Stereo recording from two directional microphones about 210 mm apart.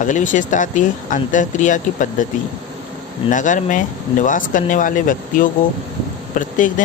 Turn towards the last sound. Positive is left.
turn(degrees=40)  # may be behind; listen again after turning